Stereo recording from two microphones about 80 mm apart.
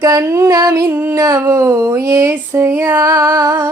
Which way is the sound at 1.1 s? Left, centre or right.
Right.